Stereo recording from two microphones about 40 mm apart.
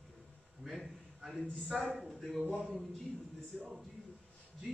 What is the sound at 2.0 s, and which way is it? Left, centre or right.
Speech, centre.